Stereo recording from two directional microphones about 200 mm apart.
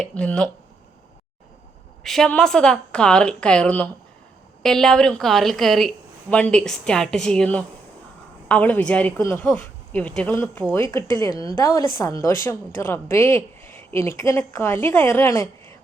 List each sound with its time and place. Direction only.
0.0 s a woman's voice: 5° left (ahead or behind)
2.0 s a woman's voice: 5° left (ahead or behind)